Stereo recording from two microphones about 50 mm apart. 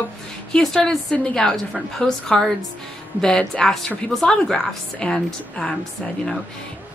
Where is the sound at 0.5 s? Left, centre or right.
Centre.